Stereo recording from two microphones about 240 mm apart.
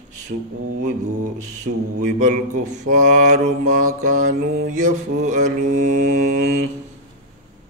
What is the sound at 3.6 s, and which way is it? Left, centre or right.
Mantra, right.